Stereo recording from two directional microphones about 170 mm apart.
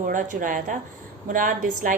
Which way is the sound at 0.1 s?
50° right (ahead or behind).